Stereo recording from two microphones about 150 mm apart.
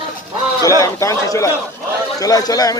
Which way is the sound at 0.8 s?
20° left (ahead or behind).